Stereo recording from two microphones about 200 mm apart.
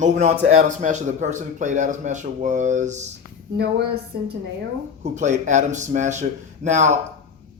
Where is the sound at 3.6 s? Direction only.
55° right (ahead or behind).